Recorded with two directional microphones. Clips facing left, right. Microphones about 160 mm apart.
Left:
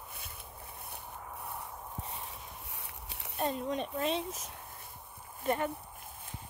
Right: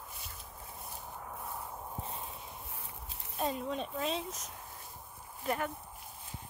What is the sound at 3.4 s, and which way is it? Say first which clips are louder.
Speech: left 2 dB; 5° right (ahead or behind).